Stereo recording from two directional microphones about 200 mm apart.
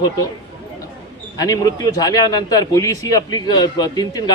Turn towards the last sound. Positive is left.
turn(degrees=20)  # may be behind; listen again after turning